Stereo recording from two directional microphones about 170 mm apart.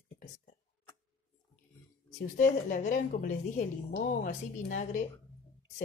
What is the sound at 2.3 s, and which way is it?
A woman's voice, 50° left (ahead or behind).